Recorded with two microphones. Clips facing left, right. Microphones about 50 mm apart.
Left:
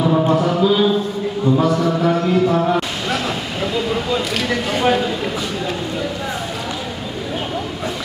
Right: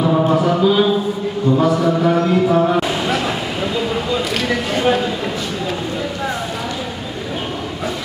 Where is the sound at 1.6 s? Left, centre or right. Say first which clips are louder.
Right 4 dB; centre.